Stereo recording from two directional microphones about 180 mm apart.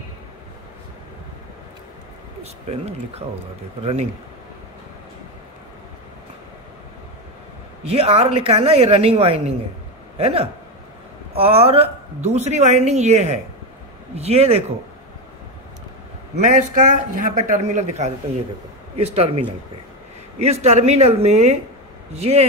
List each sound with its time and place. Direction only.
2.4 s speech: 35° right (ahead or behind)
7.9 s speech: 35° right (ahead or behind)
16.4 s speech: 45° right (ahead or behind)